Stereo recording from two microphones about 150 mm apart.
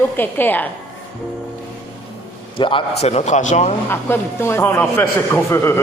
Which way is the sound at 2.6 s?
35° left (ahead or behind).